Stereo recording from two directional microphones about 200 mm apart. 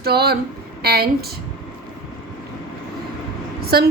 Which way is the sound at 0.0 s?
50° right (ahead or behind).